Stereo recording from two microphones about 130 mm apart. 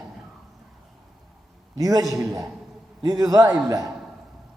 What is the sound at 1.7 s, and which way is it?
Speech, 30° right (ahead or behind).